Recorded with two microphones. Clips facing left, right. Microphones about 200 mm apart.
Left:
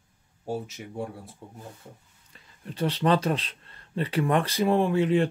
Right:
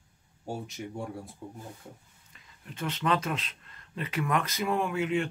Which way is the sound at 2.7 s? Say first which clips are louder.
Left 6 dB; 35° left (ahead or behind).